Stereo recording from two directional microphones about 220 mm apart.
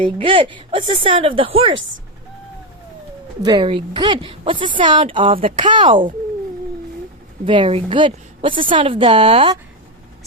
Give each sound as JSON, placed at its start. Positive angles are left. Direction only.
{"t": 0.2, "sound": "a woman's voice", "side_deg": -25}
{"t": 3.4, "sound": "a woman's voice", "side_deg": -20}
{"t": 7.4, "sound": "a woman's voice", "side_deg": -25}